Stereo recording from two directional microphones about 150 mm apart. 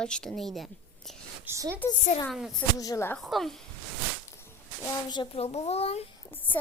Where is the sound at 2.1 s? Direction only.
50° left (ahead or behind).